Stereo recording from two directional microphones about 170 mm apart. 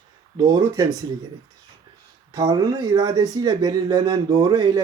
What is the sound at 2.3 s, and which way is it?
Speech, 25° right (ahead or behind).